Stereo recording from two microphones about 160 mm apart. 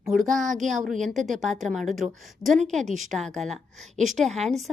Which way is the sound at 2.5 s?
50° right (ahead or behind).